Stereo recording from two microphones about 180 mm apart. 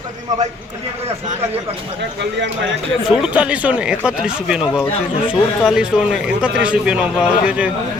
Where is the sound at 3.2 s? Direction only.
5° right (ahead or behind).